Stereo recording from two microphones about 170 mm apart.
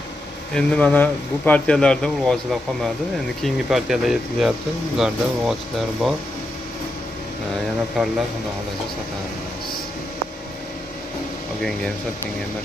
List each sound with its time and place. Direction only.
0.6 s speech: 5° left (ahead or behind)
3.4 s speech: centre (ahead or behind)
8.0 s speech: centre (ahead or behind)